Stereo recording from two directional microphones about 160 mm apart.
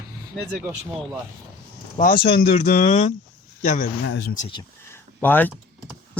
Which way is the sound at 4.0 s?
90° left.